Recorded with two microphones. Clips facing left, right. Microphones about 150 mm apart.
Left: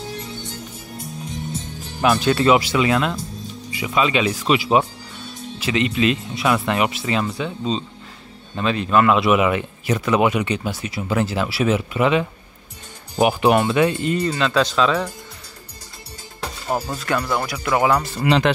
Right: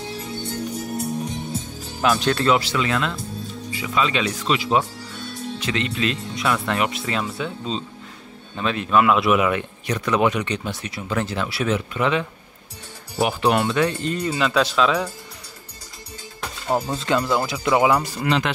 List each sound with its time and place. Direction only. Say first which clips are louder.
0.4 s music: right 7 dB; 55° right (ahead or behind)
2.0 s speech: left 2 dB; 5° left (ahead or behind)
16.7 s speech: right 2 dB; 20° right (ahead or behind)